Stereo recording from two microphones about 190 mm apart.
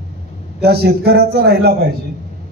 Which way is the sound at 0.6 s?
55° right (ahead or behind).